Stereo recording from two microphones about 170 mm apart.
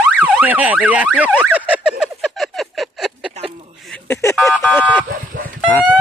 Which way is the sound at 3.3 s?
35° right (ahead or behind).